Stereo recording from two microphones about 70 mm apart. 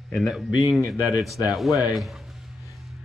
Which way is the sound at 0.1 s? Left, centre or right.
Centre.